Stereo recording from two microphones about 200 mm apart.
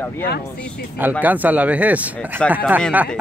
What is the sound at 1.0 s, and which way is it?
Speech, 10° right (ahead or behind).